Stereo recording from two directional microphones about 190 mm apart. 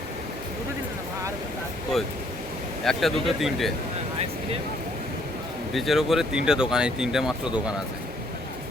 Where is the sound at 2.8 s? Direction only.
Centre (ahead or behind).